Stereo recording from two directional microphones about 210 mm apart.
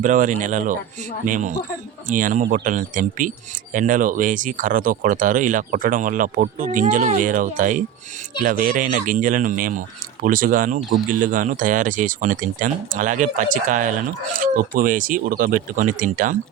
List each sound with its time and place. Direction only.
0.0 s speech: 35° right (ahead or behind)